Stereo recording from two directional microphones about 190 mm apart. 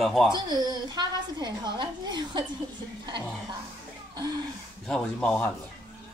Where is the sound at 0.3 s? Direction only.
20° right (ahead or behind).